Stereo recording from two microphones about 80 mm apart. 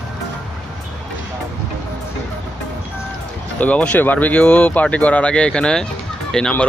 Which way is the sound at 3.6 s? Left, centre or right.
Centre.